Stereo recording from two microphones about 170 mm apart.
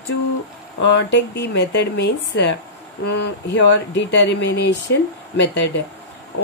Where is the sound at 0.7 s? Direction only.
90° left.